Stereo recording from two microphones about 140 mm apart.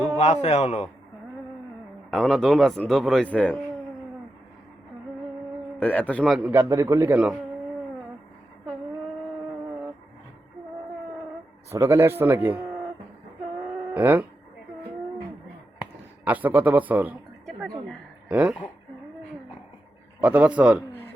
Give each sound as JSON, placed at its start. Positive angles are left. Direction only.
{"t": 0.4, "sound": "a man's voice", "side_deg": 55}
{"t": 2.0, "sound": "a man's voice", "side_deg": 5}
{"t": 5.8, "sound": "a man's voice", "side_deg": 10}
{"t": 6.2, "sound": "a man's voice", "side_deg": -5}
{"t": 6.5, "sound": "a man's voice", "side_deg": -20}
{"t": 11.7, "sound": "a man's voice", "side_deg": -20}
{"t": 13.9, "sound": "a man's voice", "side_deg": -15}
{"t": 16.2, "sound": "a man's voice", "side_deg": -10}
{"t": 18.3, "sound": "speech", "side_deg": -10}
{"t": 20.2, "sound": "a man's voice", "side_deg": -10}